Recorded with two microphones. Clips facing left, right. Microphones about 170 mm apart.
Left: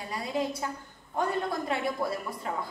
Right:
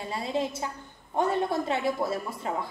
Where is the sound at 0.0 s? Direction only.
25° right (ahead or behind).